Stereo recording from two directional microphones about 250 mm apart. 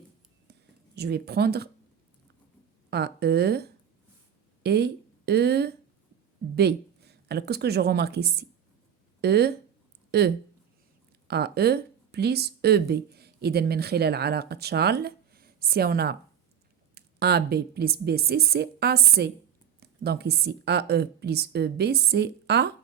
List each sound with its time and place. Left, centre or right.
0.9 s a woman's voice: right
2.9 s a woman's voice: right